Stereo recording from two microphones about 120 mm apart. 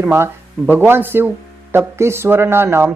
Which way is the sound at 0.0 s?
20° right (ahead or behind).